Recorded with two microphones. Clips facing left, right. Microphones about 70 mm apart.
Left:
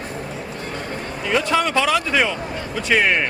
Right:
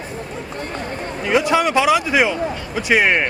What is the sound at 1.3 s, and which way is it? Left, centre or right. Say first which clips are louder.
A man's voice: right 3 dB; centre.